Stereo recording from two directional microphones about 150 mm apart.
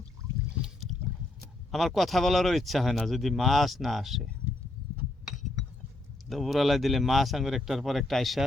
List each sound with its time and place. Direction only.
1.7 s speech: centre (ahead or behind)
6.2 s speech: centre (ahead or behind)